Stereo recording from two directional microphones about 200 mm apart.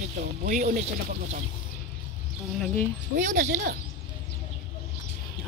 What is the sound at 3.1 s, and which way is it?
Speech, 40° right (ahead or behind).